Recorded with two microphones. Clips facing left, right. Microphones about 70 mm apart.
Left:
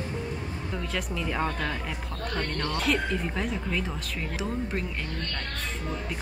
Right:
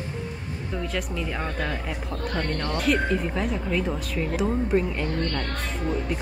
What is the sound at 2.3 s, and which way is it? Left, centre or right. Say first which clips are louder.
Speech: right 2 dB; centre.